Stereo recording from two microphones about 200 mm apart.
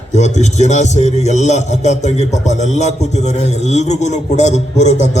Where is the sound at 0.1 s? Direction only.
35° left (ahead or behind).